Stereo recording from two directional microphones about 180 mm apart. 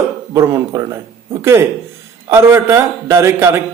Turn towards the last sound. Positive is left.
turn(degrees=-15)  # may be behind; listen again after turning